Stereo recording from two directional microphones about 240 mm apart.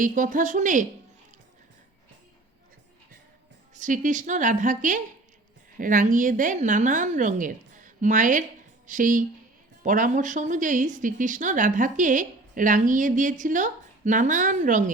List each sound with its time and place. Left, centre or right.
0.0 s a woman's voice: right
3.8 s a woman's voice: right